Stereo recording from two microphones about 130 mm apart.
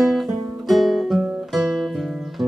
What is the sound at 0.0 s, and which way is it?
Guitar, centre (ahead or behind).